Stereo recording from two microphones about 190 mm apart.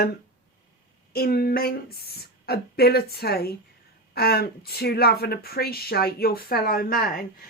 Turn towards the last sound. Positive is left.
turn(degrees=50)  # may be behind; listen again after turning